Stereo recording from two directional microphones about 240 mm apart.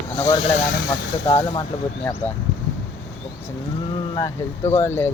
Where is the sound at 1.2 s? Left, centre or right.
Centre.